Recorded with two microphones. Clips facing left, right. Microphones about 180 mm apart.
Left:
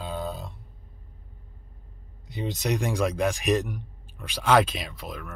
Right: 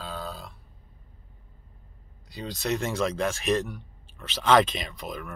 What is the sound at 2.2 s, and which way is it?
Speech, 20° left (ahead or behind).